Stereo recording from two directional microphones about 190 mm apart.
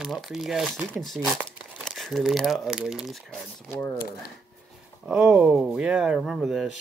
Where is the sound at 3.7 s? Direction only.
10° left (ahead or behind).